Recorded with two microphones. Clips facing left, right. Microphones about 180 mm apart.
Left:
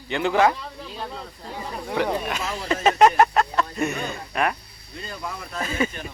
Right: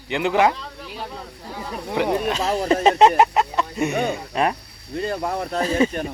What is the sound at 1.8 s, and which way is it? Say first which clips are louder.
Speech: right 4 dB; 15° right (ahead or behind).